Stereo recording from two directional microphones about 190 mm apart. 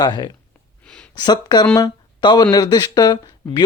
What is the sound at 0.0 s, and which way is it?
Speech, 20° left (ahead or behind).